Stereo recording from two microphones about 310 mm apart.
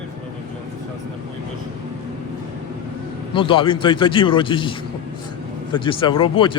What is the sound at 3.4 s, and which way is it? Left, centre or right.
Speech, centre.